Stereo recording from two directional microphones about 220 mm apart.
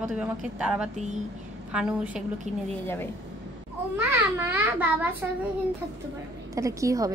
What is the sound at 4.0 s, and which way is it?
A woman's voice, 10° right (ahead or behind).